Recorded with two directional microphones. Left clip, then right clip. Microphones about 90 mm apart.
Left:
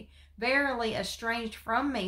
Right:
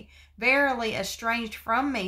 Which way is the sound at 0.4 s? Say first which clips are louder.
Right 5 dB; 30° right (ahead or behind).